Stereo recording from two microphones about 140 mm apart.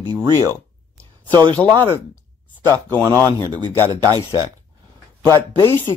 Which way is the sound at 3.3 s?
30° right (ahead or behind).